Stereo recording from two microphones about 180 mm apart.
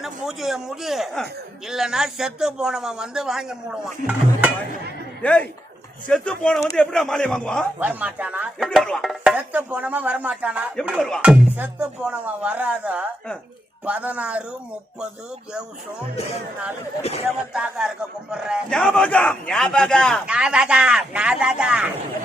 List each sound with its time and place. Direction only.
0.0 s a man's voice: centre (ahead or behind)
5.2 s a man's voice: 5° left (ahead or behind)
7.8 s a man's voice: 10° right (ahead or behind)
16.1 s speech: 35° left (ahead or behind)
17.2 s a man's voice: 5° right (ahead or behind)